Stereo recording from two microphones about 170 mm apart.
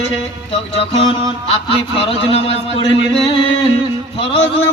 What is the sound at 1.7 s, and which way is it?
Speech, 35° left (ahead or behind).